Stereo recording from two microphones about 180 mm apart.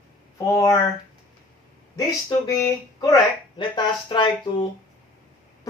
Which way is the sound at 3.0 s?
25° left (ahead or behind).